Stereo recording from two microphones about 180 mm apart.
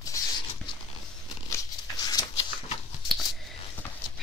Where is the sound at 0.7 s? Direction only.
25° left (ahead or behind).